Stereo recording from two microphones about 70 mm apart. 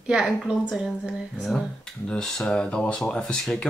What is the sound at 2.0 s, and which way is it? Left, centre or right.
Speech, centre.